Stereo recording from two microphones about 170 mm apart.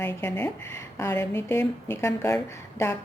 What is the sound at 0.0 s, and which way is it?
A woman's voice, 10° left (ahead or behind).